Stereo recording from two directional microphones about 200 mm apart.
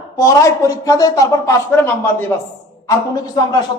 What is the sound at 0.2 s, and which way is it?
A man's voice, 15° left (ahead or behind).